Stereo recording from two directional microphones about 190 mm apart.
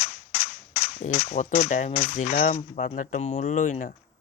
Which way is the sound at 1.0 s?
40° left (ahead or behind).